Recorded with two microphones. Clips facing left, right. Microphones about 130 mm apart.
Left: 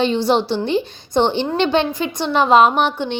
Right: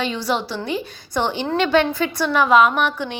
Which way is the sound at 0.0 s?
25° left (ahead or behind).